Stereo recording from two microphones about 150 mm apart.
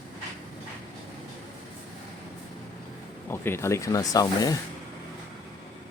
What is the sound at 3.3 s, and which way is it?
Speech, 15° left (ahead or behind).